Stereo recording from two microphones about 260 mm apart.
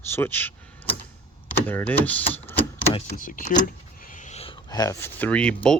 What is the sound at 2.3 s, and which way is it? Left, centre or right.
Typewriter, centre.